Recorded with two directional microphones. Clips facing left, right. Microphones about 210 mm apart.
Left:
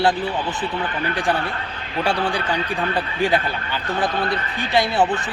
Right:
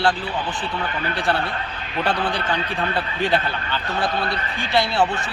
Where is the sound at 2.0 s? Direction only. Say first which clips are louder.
Left 1 dB; 10° left (ahead or behind).